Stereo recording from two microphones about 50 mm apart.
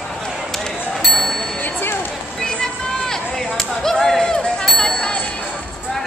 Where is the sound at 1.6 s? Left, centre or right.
Left.